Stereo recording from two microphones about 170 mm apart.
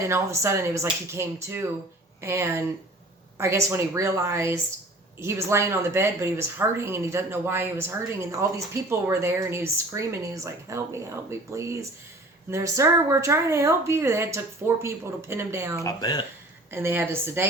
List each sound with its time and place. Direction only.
0.1 s speech: 15° right (ahead or behind)
15.8 s speech: 20° left (ahead or behind)
16.7 s speech: 15° right (ahead or behind)